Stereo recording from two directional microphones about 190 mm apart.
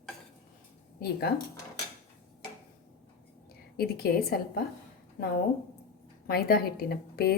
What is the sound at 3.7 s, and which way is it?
Speech, 55° left (ahead or behind).